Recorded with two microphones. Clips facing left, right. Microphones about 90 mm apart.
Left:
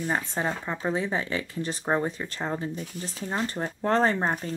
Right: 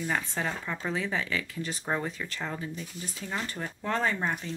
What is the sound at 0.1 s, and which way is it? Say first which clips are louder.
Speech: left 4 dB; 25° left (ahead or behind).